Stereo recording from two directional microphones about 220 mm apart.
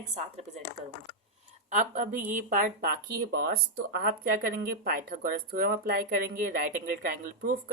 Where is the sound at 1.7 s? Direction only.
35° right (ahead or behind).